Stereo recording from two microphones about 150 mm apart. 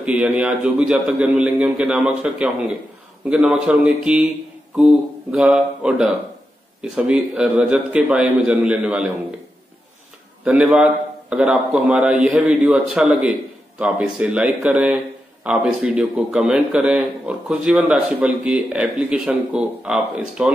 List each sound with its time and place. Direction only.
0.0 s a man's voice: 10° right (ahead or behind)
5.3 s a man's voice: 5° right (ahead or behind)
10.4 s a man's voice: 10° right (ahead or behind)